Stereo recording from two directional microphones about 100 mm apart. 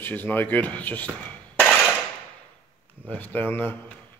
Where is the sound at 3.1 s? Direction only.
15° left (ahead or behind).